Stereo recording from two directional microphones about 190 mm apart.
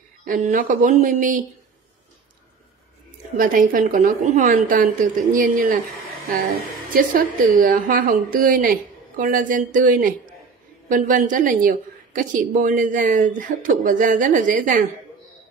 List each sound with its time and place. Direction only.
0.2 s speech: 45° right (ahead or behind)
3.3 s speech: 45° right (ahead or behind)
6.9 s speech: 45° right (ahead or behind)